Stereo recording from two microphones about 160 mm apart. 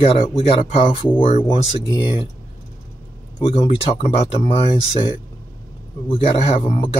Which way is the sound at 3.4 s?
40° left (ahead or behind).